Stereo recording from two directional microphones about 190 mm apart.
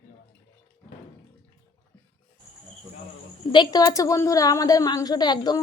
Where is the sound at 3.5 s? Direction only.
20° left (ahead or behind).